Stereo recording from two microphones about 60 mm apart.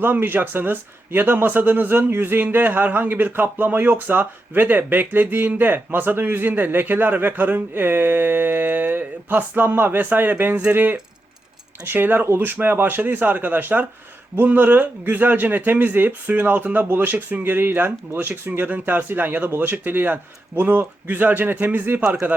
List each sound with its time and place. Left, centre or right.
0.0 s a man's voice: right